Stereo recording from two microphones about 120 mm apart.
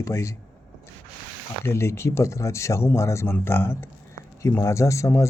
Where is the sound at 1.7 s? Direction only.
20° left (ahead or behind).